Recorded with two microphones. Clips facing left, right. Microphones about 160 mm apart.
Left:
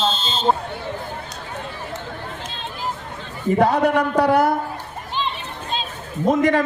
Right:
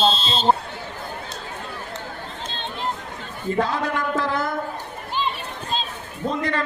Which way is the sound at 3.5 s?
80° left.